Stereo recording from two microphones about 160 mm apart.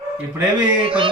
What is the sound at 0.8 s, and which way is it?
Music, 35° right (ahead or behind).